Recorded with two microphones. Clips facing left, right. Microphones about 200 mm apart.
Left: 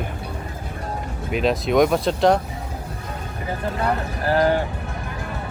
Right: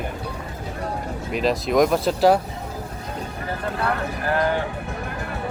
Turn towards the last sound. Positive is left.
turn(degrees=35)  # may be behind; listen again after turning